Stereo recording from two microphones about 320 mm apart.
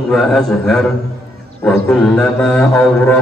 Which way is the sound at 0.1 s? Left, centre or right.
Centre.